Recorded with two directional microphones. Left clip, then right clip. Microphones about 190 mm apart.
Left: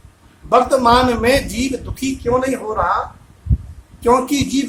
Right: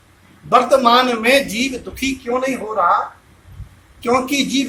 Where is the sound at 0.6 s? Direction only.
25° left (ahead or behind).